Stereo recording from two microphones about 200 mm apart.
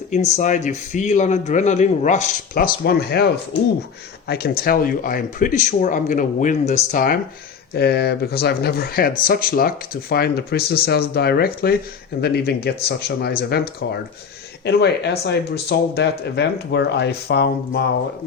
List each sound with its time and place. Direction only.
0.1 s speech: 35° left (ahead or behind); by 17.8 s 55° left (ahead or behind)